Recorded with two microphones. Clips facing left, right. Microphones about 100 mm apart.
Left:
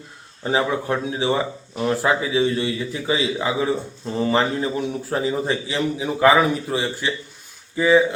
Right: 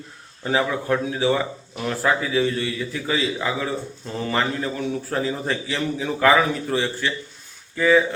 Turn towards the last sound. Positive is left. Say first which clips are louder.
# left 1 dB
turn(degrees=15)  # may be behind; listen again after turning